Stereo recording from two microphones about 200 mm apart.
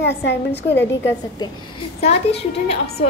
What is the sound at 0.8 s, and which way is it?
Speech, 10° left (ahead or behind).